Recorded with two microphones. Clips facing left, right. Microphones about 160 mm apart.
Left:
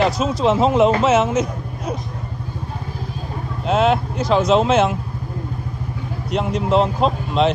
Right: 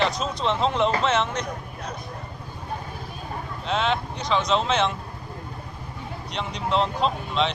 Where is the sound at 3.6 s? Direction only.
5° left (ahead or behind).